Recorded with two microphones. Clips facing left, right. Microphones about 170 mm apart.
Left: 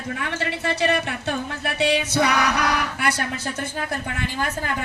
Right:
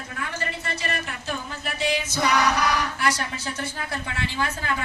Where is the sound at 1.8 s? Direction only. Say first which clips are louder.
Left 5 dB; 70° left (ahead or behind).